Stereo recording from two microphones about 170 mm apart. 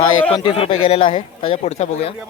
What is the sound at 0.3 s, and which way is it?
Speech, 30° left (ahead or behind).